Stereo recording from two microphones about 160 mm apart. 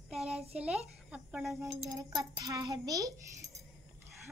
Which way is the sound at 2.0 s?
25° right (ahead or behind).